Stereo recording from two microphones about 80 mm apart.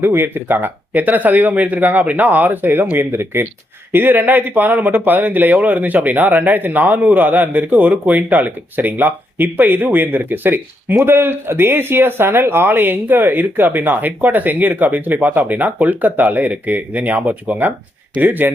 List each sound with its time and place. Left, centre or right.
0.0 s speech: right